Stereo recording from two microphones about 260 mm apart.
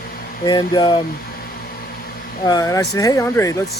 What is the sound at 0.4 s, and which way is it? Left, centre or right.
Speech, centre.